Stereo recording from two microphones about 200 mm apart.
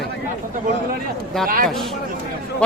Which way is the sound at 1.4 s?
45° right (ahead or behind).